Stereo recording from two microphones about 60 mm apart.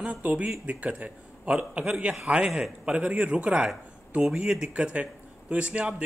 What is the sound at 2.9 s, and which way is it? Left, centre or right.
Speech, right.